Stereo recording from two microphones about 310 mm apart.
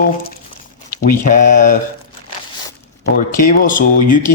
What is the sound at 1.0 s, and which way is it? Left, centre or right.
Speech, left.